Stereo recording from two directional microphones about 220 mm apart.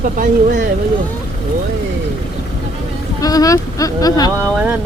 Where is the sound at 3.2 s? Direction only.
15° left (ahead or behind).